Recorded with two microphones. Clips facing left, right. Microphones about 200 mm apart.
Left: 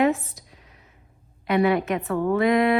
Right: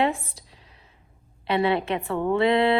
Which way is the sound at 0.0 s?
30° right (ahead or behind).